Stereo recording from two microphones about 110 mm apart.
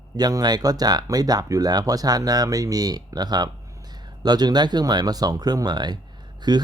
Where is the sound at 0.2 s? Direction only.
35° right (ahead or behind).